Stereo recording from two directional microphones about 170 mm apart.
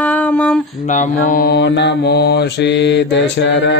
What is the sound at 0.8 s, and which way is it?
Mantra, 50° left (ahead or behind).